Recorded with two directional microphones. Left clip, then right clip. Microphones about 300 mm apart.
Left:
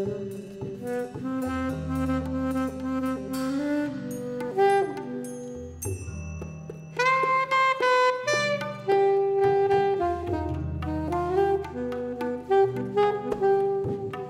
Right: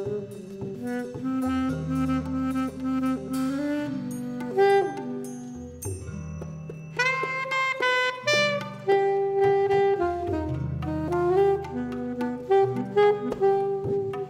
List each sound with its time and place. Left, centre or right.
0.8 s music: right
7.0 s saxophone: right
7.5 s music: right
8.8 s saxophone: right
10.9 s music: right